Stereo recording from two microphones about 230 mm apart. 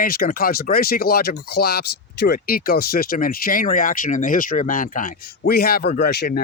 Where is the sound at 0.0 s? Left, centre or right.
Left.